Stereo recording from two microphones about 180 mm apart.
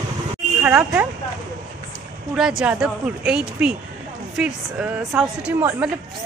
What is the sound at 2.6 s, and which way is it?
A woman's voice, 5° right (ahead or behind).